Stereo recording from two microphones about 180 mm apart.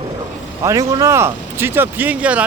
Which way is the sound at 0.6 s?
15° right (ahead or behind).